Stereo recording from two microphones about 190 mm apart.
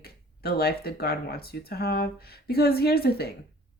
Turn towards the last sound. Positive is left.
turn(degrees=55)  # may be behind; listen again after turning